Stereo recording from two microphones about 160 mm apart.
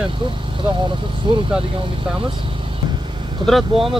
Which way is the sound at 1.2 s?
30° right (ahead or behind).